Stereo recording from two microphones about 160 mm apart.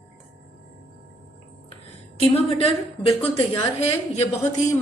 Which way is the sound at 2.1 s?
40° left (ahead or behind).